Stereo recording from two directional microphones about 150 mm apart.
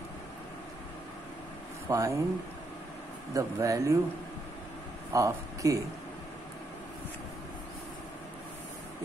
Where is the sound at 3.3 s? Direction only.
20° right (ahead or behind).